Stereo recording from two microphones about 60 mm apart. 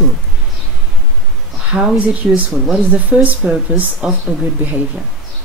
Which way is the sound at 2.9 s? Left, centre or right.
Right.